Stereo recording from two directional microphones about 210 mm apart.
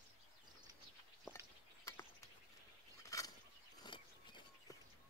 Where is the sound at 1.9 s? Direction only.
15° left (ahead or behind).